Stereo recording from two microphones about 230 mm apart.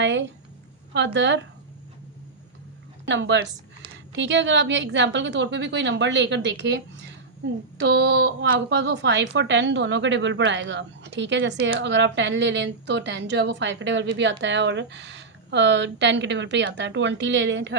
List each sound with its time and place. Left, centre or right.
0.0 s a woman's voice: right
3.1 s a woman's voice: right